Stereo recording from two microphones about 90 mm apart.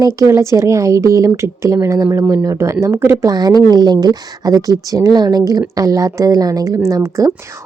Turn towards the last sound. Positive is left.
turn(degrees=-35)  # may be behind; listen again after turning